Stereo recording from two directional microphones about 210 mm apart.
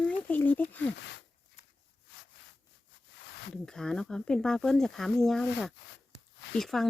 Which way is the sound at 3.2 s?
55° left (ahead or behind).